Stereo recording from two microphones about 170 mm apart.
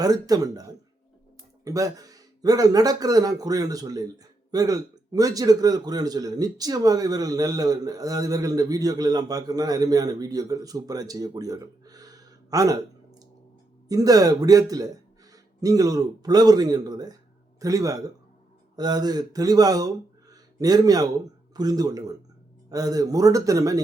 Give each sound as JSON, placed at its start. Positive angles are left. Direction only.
{"t": 0.0, "sound": "a man's voice", "side_deg": -20}